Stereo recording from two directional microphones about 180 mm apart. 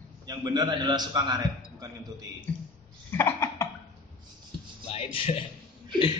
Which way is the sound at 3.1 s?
10° left (ahead or behind).